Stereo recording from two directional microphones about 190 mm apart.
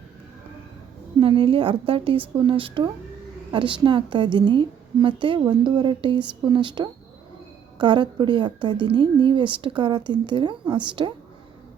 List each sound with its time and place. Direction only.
1.2 s a woman's voice: 30° right (ahead or behind)